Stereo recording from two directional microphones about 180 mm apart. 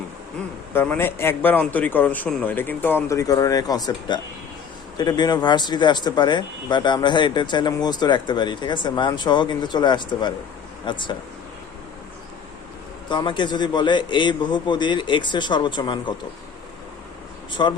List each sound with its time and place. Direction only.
0.7 s a man's voice: 10° left (ahead or behind)
13.1 s speech: 25° left (ahead or behind)
17.5 s speech: 25° left (ahead or behind)